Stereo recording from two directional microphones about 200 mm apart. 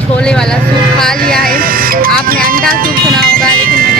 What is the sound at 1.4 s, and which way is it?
Vehicle, 45° right (ahead or behind).